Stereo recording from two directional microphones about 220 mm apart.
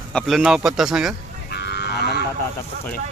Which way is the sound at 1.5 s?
50° left (ahead or behind).